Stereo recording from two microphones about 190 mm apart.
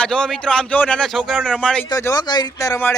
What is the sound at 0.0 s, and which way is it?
Speech, 5° left (ahead or behind).